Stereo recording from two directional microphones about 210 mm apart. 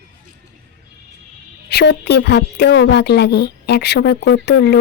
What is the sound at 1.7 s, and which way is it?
A woman's voice, 55° left (ahead or behind).